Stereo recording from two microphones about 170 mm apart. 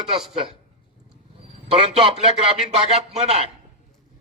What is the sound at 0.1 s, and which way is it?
Speech, 35° right (ahead or behind).